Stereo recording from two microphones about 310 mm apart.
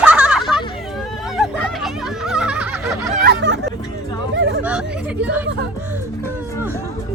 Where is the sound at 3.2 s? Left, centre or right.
Right.